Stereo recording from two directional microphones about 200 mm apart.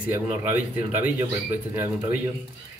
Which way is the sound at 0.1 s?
10° right (ahead or behind).